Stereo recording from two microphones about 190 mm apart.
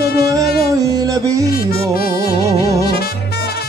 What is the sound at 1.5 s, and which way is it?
Music, 50° left (ahead or behind).